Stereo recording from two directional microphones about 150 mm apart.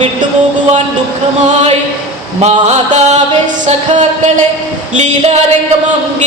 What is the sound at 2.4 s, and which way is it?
Speech, 50° right (ahead or behind).